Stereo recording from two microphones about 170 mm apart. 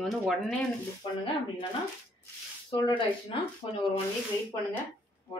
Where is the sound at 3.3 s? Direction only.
30° left (ahead or behind).